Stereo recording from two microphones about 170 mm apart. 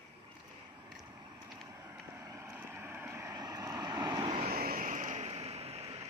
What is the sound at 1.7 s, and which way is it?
Vehicle, 15° right (ahead or behind).